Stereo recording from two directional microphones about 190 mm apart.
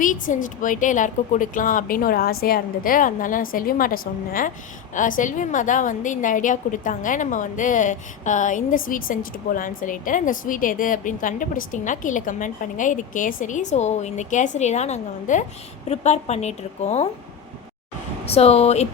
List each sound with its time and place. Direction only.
0.0 s a woman's voice: 45° left (ahead or behind)
18.3 s a woman's voice: 30° left (ahead or behind)